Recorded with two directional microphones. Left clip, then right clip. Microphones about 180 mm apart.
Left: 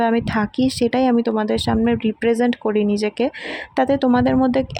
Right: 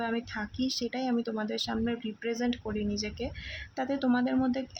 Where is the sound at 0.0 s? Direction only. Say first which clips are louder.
Left 15 dB; 40° left (ahead or behind).